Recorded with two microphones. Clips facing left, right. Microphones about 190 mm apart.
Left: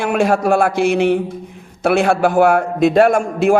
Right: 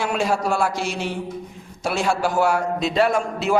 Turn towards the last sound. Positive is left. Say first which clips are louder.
# left 7 dB
turn(degrees=50)  # may be behind; listen again after turning